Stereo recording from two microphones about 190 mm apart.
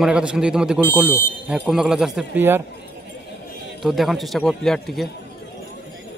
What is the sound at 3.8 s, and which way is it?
A man's voice, centre (ahead or behind).